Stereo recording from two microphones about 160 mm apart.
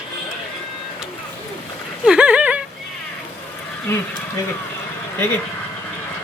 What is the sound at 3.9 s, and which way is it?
Speech, 15° left (ahead or behind).